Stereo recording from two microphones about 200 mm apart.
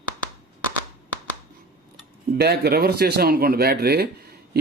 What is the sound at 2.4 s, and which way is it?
Speech, 55° right (ahead or behind).